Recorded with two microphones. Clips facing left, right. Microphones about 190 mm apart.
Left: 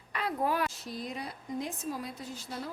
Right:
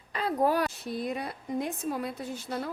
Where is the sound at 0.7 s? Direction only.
60° right (ahead or behind).